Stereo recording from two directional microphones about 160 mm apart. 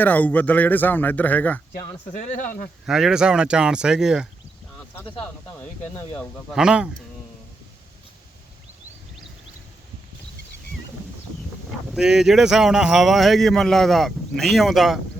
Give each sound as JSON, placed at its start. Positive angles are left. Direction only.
{"t": 0.0, "sound": "a man's voice", "side_deg": 10}
{"t": 2.1, "sound": "speech", "side_deg": 50}
{"t": 2.8, "sound": "speech", "side_deg": -5}
{"t": 4.9, "sound": "a man's voice", "side_deg": 10}
{"t": 6.1, "sound": "speech", "side_deg": -5}
{"t": 11.9, "sound": "speech", "side_deg": -5}